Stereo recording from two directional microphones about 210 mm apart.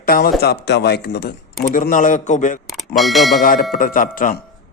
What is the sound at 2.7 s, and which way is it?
Speech, centre (ahead or behind).